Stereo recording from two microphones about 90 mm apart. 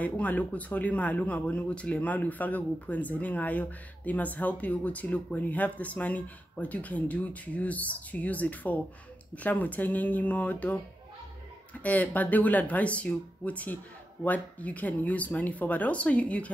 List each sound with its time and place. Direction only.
0.0 s speech: 15° left (ahead or behind)
11.8 s speech: 15° left (ahead or behind)